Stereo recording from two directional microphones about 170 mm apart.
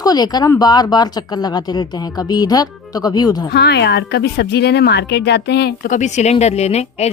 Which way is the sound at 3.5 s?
75° left (ahead or behind).